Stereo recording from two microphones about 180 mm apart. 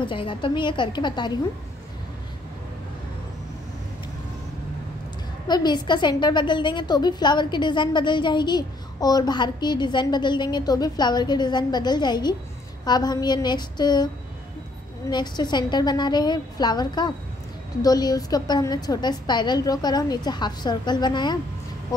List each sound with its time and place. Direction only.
0.0 s a woman's voice: 30° left (ahead or behind)
5.5 s a woman's voice: 25° left (ahead or behind)
15.0 s a woman's voice: 25° left (ahead or behind)